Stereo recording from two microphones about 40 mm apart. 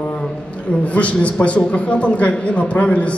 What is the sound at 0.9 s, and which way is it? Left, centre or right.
A man's voice, left.